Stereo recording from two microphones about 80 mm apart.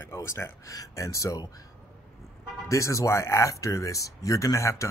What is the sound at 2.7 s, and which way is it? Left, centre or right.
Speech, left.